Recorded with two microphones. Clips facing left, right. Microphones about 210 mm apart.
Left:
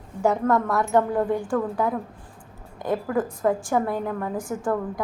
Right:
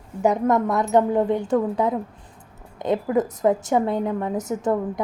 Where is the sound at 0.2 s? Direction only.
20° right (ahead or behind).